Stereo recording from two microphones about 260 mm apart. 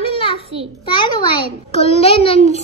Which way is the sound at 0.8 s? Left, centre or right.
Centre.